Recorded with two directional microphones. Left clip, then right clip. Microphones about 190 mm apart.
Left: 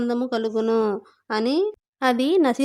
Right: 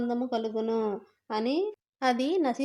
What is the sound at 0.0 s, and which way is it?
Speech, 20° left (ahead or behind).